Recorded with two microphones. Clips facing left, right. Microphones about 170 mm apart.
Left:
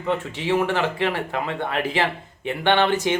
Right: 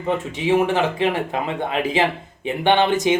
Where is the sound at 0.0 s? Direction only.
15° right (ahead or behind).